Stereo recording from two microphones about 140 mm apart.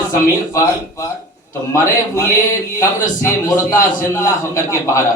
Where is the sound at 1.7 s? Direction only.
20° left (ahead or behind).